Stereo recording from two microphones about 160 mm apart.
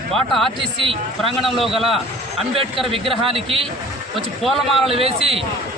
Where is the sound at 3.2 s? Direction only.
35° right (ahead or behind).